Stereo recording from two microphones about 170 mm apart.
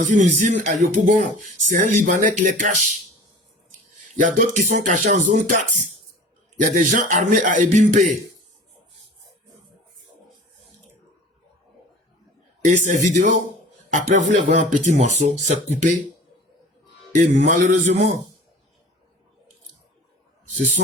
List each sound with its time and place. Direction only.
0.0 s speech: 50° right (ahead or behind)
4.2 s speech: 50° right (ahead or behind)
12.6 s speech: 45° right (ahead or behind)
17.4 s speech: 45° right (ahead or behind)